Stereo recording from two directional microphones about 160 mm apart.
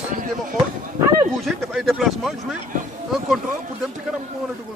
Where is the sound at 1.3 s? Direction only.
Centre (ahead or behind).